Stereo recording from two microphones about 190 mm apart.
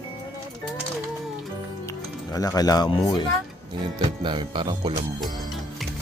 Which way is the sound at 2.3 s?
20° left (ahead or behind).